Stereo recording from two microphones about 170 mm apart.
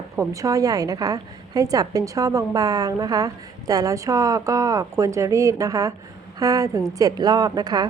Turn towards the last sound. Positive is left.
turn(degrees=-25)  # may be behind; listen again after turning